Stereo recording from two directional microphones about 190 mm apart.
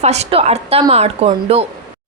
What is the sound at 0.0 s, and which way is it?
A woman's voice, 35° right (ahead or behind).